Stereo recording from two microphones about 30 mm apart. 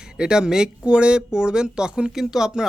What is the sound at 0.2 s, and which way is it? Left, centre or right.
Speech, right.